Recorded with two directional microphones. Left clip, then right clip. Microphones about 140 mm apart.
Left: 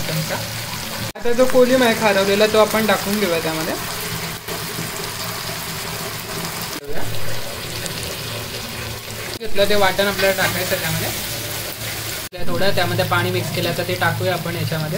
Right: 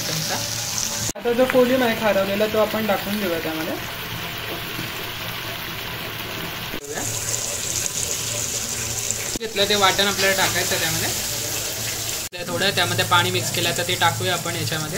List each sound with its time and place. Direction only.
1.5 s speech: 15° left (ahead or behind)
9.6 s speech: centre (ahead or behind)
12.6 s speech: centre (ahead or behind)